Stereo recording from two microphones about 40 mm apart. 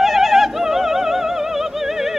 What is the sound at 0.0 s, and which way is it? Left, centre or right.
Opera, centre.